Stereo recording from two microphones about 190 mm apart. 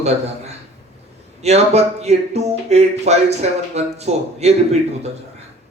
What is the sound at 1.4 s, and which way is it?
Speech, 35° right (ahead or behind).